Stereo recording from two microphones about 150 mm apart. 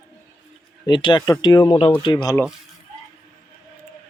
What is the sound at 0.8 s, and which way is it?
Speech, 30° left (ahead or behind).